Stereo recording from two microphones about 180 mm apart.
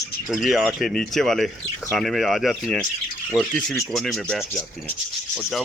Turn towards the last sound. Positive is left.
turn(degrees=0)  # may be behind; listen again after turning